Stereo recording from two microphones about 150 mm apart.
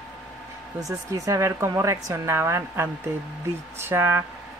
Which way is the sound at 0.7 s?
20° right (ahead or behind).